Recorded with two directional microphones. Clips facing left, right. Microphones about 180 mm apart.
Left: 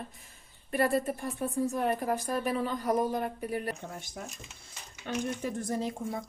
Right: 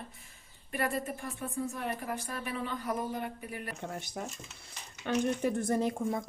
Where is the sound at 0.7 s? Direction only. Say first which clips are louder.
Left 6 dB; 35° left (ahead or behind).